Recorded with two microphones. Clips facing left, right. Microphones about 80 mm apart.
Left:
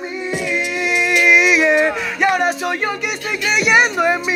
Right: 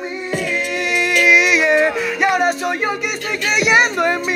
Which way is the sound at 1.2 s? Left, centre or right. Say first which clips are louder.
Left 1 dB; centre.